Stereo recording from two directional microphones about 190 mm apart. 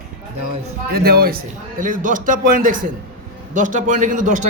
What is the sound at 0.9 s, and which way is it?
A man's voice, 55° right (ahead or behind).